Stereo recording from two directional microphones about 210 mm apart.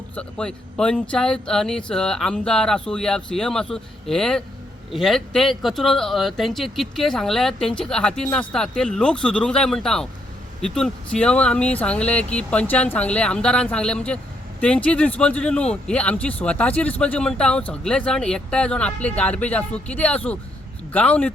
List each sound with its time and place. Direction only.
0.2 s speech: 5° left (ahead or behind)